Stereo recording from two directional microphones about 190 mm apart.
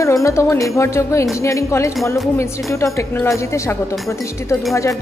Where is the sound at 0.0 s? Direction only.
15° left (ahead or behind).